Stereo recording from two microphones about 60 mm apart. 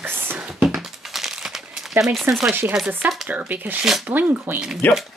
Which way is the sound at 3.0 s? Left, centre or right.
Right.